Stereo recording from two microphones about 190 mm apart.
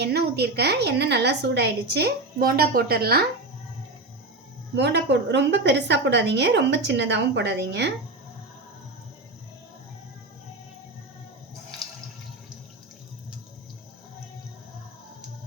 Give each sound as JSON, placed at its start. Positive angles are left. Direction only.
{"t": 0.0, "sound": "a woman's voice", "side_deg": -60}
{"t": 4.7, "sound": "a woman's voice", "side_deg": -65}